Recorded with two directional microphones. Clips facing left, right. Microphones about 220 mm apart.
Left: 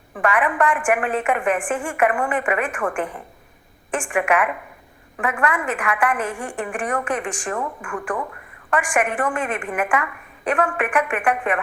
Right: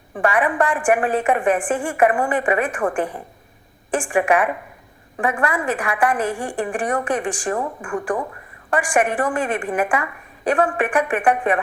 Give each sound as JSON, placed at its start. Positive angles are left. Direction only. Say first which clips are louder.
{"t": 0.1, "sound": "a woman's voice", "louder": "right 2 dB", "side_deg": -30}